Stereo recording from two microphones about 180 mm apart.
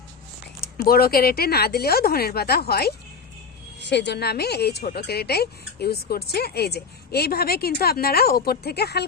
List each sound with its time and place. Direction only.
0.9 s a woman's voice: 55° left (ahead or behind)
3.8 s a woman's voice: 70° left (ahead or behind)